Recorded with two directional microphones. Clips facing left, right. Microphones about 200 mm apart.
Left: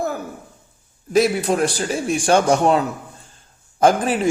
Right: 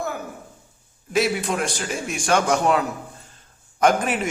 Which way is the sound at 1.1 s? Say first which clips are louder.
Left 5 dB; 35° left (ahead or behind).